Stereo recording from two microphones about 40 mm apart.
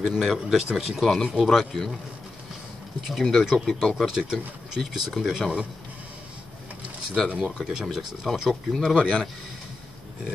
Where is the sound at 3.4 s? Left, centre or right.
Centre.